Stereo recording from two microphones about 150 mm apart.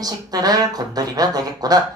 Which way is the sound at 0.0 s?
25° right (ahead or behind).